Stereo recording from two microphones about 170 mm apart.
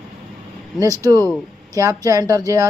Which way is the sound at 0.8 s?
20° right (ahead or behind).